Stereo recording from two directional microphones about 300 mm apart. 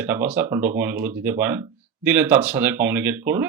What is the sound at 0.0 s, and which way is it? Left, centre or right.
Speech, centre.